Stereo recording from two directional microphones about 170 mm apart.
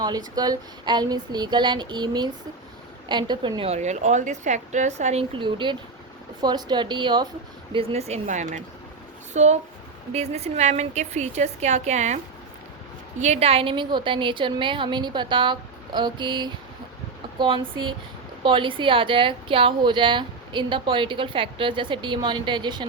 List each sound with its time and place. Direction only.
0.0 s a woman's voice: 25° right (ahead or behind); by 5.2 s 40° right (ahead or behind)
5.4 s a woman's voice: 30° right (ahead or behind)